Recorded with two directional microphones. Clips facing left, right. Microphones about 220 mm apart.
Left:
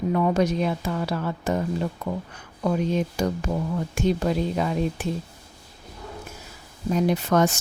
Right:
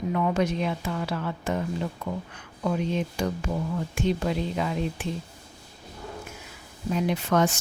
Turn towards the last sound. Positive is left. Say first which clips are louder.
# left 3 dB
turn(degrees=40)  # may be behind; listen again after turning